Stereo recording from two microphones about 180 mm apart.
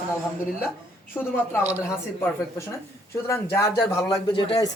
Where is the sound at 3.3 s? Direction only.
15° left (ahead or behind).